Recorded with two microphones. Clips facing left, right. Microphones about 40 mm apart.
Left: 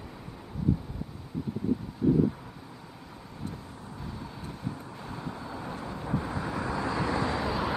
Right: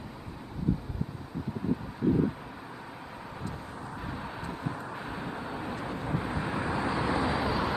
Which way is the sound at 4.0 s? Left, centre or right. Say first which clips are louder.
Right 2 dB; right.